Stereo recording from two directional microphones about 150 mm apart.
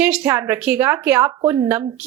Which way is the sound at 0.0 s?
10° right (ahead or behind).